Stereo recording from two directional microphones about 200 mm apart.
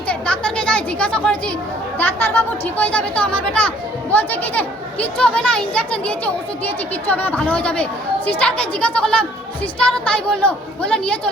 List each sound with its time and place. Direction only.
0.1 s a woman's voice: 5° left (ahead or behind)